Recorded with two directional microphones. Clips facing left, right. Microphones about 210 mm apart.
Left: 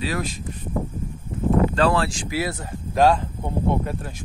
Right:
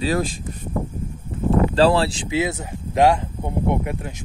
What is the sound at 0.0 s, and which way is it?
Speech, 30° right (ahead or behind).